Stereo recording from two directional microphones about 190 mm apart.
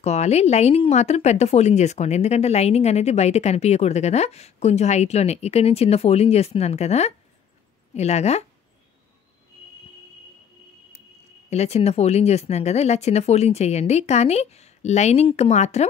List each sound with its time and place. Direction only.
0.0 s speech: 35° left (ahead or behind)
11.5 s speech: 35° left (ahead or behind)